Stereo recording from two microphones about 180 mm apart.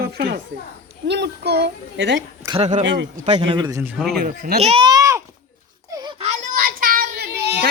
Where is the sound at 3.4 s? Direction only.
25° right (ahead or behind).